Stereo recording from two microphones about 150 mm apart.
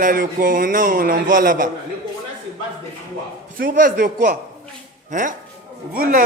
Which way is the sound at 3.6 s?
60° right (ahead or behind).